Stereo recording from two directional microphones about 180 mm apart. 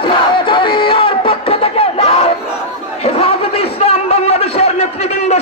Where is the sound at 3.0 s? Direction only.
35° left (ahead or behind).